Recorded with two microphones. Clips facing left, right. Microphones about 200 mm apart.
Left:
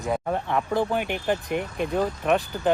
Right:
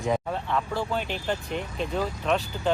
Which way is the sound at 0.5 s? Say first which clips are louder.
Left 3 dB; 20° left (ahead or behind).